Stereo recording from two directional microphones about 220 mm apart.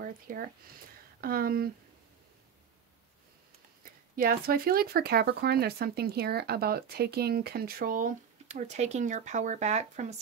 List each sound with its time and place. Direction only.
0.0 s speech: 40° right (ahead or behind)
4.2 s speech: 40° right (ahead or behind)